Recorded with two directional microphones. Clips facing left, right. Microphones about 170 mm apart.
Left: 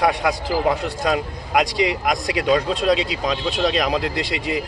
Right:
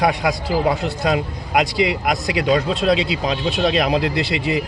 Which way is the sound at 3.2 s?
5° right (ahead or behind).